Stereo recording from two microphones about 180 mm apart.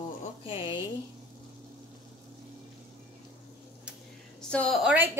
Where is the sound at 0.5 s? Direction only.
30° left (ahead or behind).